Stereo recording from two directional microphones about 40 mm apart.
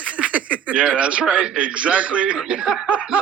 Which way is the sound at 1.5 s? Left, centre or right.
Right.